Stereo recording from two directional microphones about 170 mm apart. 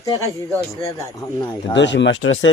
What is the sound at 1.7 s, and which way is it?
Speech, 90° left.